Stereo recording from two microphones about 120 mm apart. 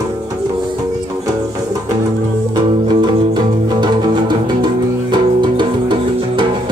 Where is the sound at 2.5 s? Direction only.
40° right (ahead or behind).